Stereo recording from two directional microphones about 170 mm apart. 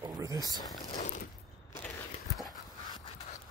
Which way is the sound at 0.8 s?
45° left (ahead or behind).